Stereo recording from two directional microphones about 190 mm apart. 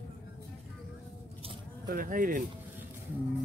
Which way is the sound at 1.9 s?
45° right (ahead or behind).